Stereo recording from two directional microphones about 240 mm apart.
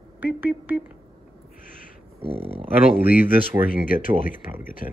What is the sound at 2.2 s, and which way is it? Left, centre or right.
Speech, right.